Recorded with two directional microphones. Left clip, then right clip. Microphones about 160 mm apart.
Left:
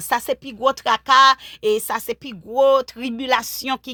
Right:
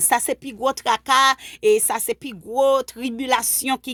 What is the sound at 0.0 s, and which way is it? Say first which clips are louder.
Speech: right 1 dB; 45° right (ahead or behind).